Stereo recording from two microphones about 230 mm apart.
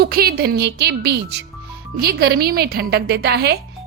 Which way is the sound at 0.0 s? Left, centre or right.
Right.